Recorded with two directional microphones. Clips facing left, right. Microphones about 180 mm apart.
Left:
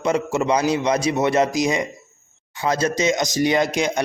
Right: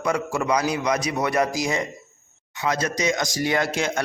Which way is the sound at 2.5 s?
30° left (ahead or behind).